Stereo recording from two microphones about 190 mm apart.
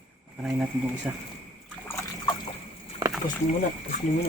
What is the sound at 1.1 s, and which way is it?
Speech, 5° right (ahead or behind).